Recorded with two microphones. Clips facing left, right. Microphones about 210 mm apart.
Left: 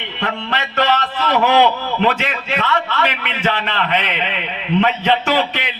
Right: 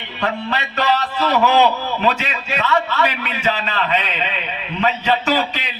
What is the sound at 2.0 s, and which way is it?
A man's voice, 55° left (ahead or behind).